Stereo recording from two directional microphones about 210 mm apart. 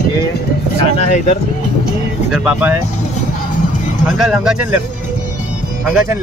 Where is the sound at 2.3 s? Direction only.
5° right (ahead or behind).